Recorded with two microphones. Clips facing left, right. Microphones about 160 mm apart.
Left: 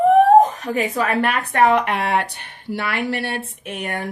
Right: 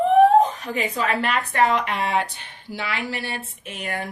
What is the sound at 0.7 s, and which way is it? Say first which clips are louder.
Speech: left 3 dB; 45° left (ahead or behind).